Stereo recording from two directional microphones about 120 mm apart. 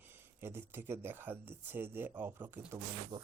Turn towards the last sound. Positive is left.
turn(degrees=-30)  # may be behind; listen again after turning